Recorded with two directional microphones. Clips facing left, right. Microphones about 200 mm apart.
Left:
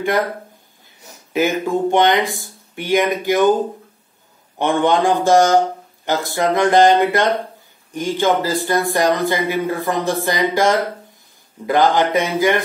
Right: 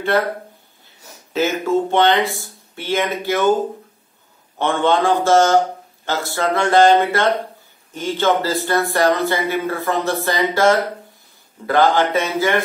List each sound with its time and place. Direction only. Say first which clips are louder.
1.3 s speech: even; 15° left (ahead or behind)
4.6 s speech: left 1 dB; 15° left (ahead or behind)